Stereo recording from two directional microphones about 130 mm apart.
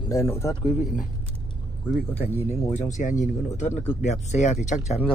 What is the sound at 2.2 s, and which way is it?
Speech, 55° left (ahead or behind).